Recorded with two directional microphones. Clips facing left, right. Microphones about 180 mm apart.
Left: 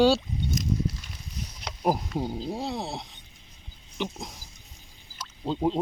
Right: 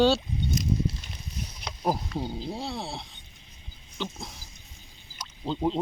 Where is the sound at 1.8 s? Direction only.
15° left (ahead or behind).